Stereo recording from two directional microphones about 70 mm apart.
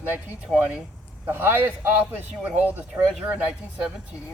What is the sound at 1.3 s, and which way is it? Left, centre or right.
A man's voice, right.